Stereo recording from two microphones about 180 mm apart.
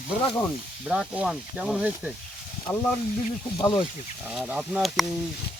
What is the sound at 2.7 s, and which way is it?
Speech, 10° left (ahead or behind).